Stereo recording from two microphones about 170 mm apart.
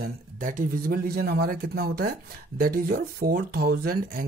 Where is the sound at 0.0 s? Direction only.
50° right (ahead or behind).